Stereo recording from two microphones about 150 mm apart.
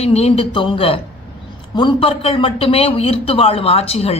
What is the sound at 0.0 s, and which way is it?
A woman's voice, 45° left (ahead or behind).